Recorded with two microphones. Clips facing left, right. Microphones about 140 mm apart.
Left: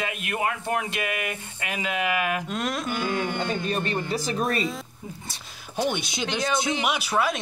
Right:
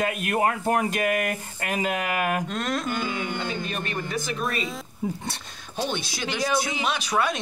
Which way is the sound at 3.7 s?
30° left (ahead or behind).